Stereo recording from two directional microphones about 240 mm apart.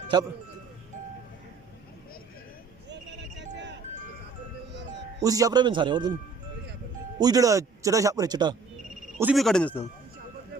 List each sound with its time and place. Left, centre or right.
2.9 s a sound: right
5.2 s speech: centre
7.2 s speech: centre
9.1 s speech: centre